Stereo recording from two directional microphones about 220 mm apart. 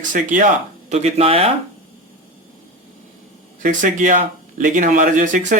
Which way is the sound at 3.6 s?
35° right (ahead or behind).